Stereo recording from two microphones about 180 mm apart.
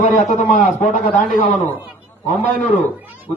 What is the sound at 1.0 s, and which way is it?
Speech, 5° left (ahead or behind).